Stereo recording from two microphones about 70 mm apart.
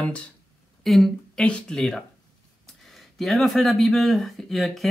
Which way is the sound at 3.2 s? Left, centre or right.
Centre.